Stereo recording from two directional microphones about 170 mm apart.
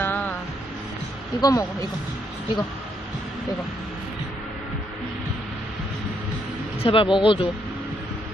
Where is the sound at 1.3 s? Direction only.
20° left (ahead or behind).